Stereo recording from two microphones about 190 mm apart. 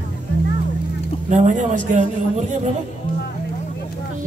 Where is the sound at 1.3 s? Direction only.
40° right (ahead or behind).